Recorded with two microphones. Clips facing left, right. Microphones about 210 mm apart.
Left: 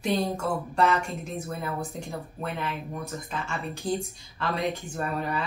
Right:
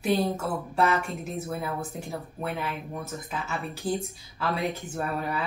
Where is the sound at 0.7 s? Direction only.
5° right (ahead or behind).